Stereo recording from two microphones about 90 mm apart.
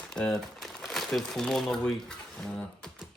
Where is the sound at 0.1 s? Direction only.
5° left (ahead or behind).